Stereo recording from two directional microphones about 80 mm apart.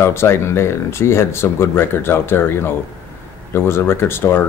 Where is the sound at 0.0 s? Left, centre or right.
Left.